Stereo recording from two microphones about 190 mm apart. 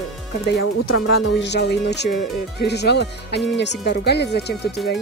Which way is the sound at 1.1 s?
60° left (ahead or behind).